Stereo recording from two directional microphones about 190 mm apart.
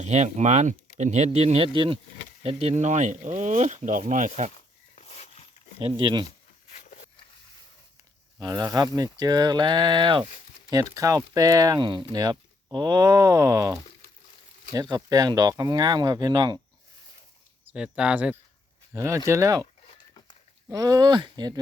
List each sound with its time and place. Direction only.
0.0 s speech: 35° right (ahead or behind)
4.9 s a sound: 35° left (ahead or behind)
5.8 s speech: 25° right (ahead or behind)
6.7 s a sound: 35° left (ahead or behind)
8.4 s speech: 20° right (ahead or behind)
17.7 s speech: 5° right (ahead or behind)
20.7 s speech: 20° right (ahead or behind)